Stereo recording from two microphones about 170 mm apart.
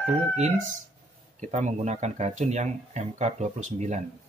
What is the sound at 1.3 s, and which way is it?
Speech, 45° right (ahead or behind).